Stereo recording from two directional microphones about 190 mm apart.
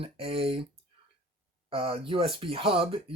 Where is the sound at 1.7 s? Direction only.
30° right (ahead or behind).